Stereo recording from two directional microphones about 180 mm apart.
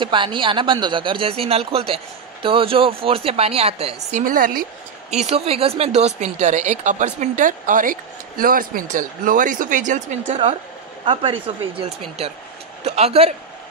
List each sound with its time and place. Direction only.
0.0 s a woman's voice: 25° right (ahead or behind); by 4.6 s 50° right (ahead or behind)
5.1 s a woman's voice: 35° right (ahead or behind)
11.1 s a woman's voice: 30° right (ahead or behind)